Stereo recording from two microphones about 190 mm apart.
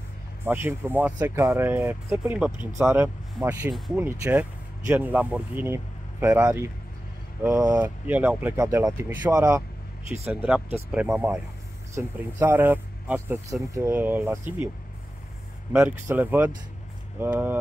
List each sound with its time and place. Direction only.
0.5 s speech: 10° right (ahead or behind)
10.3 s speech: 5° right (ahead or behind)
15.7 s speech: 10° right (ahead or behind)